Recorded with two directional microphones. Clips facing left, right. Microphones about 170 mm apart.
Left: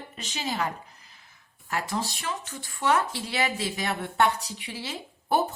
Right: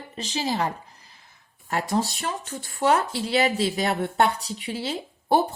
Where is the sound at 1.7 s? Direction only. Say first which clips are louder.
Right 5 dB; 40° right (ahead or behind).